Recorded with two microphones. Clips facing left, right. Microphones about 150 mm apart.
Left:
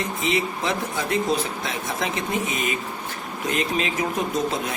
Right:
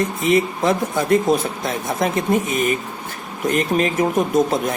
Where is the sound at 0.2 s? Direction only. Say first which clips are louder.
Right 7 dB; 50° right (ahead or behind).